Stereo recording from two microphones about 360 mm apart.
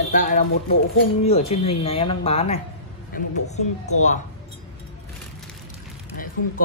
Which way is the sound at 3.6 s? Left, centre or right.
Centre.